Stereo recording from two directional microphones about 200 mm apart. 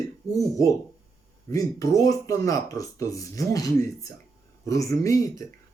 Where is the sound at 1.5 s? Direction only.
15° left (ahead or behind).